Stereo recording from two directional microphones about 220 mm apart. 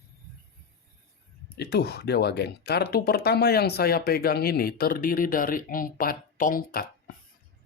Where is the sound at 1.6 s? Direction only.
50° left (ahead or behind).